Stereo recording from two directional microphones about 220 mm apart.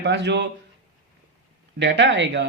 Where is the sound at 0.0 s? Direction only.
50° right (ahead or behind).